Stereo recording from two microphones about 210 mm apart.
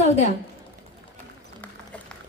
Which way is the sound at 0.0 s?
30° left (ahead or behind).